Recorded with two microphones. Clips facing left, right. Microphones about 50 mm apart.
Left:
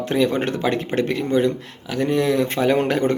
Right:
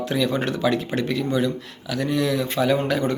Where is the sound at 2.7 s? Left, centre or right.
Left.